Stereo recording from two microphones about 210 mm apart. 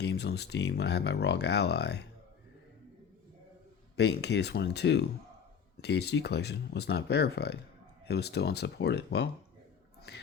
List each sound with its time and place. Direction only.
0.0 s speech: 50° left (ahead or behind)
3.9 s speech: 50° left (ahead or behind)